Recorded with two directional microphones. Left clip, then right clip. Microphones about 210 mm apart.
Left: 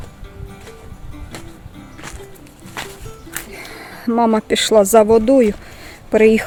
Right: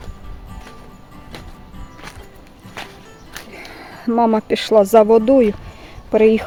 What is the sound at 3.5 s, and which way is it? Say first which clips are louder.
Speech: left 2 dB; centre (ahead or behind).